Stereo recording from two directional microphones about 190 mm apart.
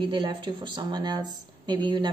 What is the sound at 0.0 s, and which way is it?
A woman's voice, 25° right (ahead or behind).